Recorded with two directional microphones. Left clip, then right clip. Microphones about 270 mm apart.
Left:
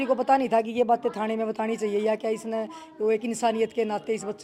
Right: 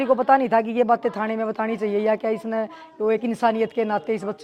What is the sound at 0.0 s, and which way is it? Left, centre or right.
Speech, centre.